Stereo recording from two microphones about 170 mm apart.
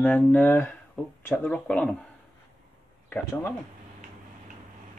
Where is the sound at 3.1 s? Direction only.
15° left (ahead or behind).